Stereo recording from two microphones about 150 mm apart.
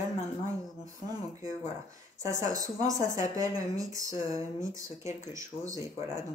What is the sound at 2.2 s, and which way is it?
A woman's voice, 20° right (ahead or behind).